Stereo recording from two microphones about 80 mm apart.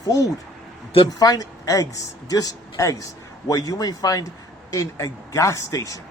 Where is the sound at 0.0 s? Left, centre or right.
Left.